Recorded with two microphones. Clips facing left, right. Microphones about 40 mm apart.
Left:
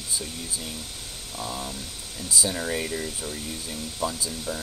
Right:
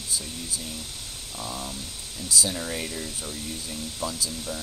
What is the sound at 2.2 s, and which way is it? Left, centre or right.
Speech, left.